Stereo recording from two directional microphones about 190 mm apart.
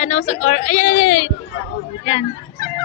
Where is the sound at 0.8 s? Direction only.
90° left.